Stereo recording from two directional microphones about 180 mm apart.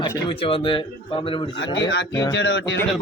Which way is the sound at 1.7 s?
80° left.